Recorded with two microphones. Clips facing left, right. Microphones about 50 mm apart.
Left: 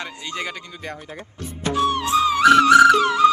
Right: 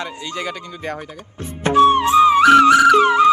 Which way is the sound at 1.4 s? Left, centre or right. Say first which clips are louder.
Right 8 dB; right.